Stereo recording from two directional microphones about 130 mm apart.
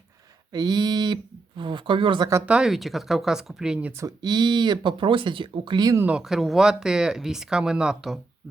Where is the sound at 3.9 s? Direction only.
30° right (ahead or behind).